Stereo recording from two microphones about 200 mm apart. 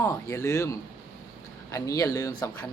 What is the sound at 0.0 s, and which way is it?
Speech, 15° left (ahead or behind).